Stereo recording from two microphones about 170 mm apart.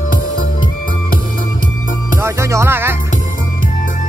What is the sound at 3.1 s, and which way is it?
Music, 50° left (ahead or behind).